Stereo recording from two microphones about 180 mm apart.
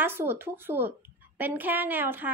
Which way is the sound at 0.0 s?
10° right (ahead or behind).